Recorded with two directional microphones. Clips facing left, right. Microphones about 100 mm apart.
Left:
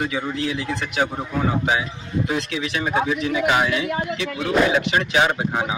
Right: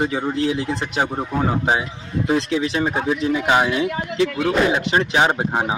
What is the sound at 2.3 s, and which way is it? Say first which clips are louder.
Speech: right 5 dB; 30° right (ahead or behind).